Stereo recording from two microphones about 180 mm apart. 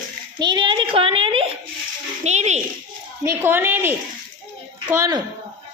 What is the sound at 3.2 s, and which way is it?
Speech, 15° right (ahead or behind).